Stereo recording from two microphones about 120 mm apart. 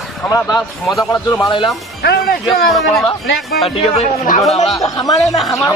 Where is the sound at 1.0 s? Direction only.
25° left (ahead or behind).